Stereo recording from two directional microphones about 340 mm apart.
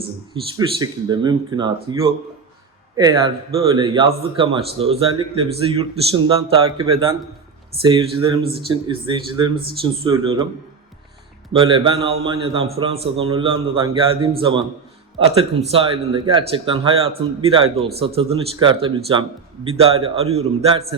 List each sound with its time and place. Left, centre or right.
0.5 s speech: centre
11.5 s speech: centre